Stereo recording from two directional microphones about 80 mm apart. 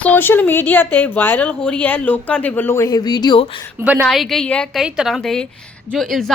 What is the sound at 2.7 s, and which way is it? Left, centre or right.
Speech, left.